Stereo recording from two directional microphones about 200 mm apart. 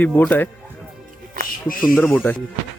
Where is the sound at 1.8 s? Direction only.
10° left (ahead or behind).